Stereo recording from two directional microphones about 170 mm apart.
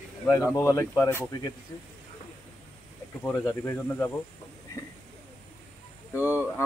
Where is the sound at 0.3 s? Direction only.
15° left (ahead or behind).